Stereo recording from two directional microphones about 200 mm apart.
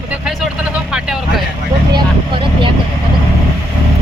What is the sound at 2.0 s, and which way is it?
Speech, 25° right (ahead or behind).